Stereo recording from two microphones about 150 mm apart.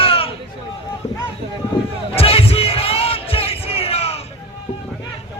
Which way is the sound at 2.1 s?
40° left (ahead or behind).